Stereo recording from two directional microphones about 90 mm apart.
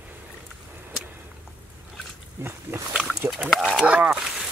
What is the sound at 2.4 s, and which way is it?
Speech, 30° right (ahead or behind).